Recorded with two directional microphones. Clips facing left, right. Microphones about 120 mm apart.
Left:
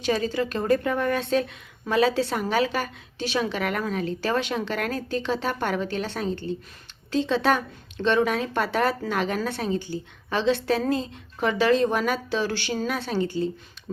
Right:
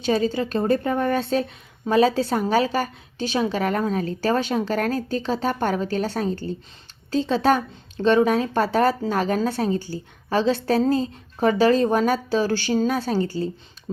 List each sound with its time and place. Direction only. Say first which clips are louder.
0.0 s a woman's voice: right 3 dB; 35° right (ahead or behind)